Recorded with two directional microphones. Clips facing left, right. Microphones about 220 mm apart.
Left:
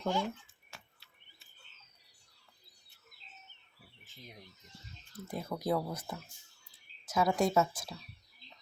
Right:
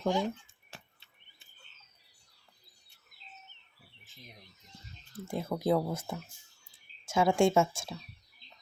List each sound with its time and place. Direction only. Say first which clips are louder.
0.0 s a child's voice: right 4 dB; 15° right (ahead or behind)
5.1 s speech: right 4 dB; 30° right (ahead or behind)